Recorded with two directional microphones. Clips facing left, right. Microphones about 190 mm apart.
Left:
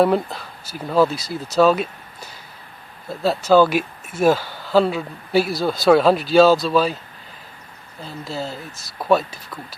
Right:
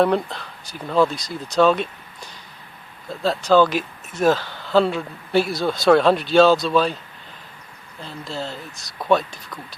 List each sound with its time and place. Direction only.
0.0 s speech: 5° left (ahead or behind)
8.0 s speech: 5° left (ahead or behind)